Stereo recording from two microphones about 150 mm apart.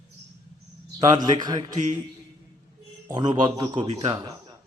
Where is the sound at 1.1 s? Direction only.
25° right (ahead or behind).